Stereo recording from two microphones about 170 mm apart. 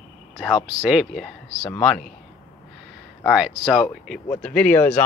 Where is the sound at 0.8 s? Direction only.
Centre (ahead or behind).